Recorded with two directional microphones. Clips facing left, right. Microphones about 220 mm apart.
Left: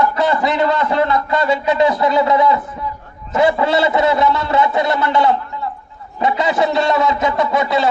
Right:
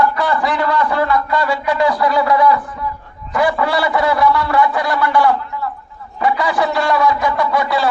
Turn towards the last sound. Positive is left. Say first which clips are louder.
# left 1 dB
turn(degrees=20)  # may be behind; listen again after turning